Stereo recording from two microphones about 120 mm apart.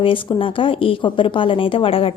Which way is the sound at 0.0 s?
45° left (ahead or behind).